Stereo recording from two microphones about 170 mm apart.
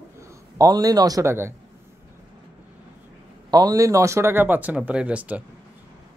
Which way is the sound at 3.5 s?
20° right (ahead or behind).